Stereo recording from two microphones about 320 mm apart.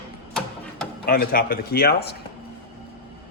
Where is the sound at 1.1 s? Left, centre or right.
Left.